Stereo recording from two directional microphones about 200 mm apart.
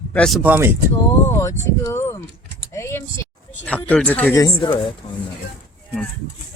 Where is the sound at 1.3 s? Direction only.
15° left (ahead or behind).